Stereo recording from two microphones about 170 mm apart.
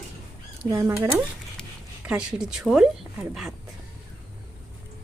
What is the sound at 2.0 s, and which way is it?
A woman's voice, 5° right (ahead or behind).